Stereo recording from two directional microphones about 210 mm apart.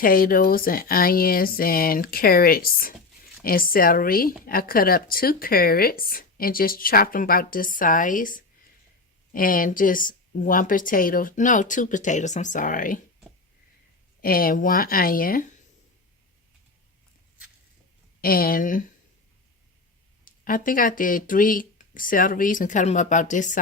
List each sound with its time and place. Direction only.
0.0 s a woman's voice: 45° left (ahead or behind)
14.2 s speech: 45° left (ahead or behind)
18.2 s speech: 45° left (ahead or behind)
20.2 s a woman's voice: 40° left (ahead or behind)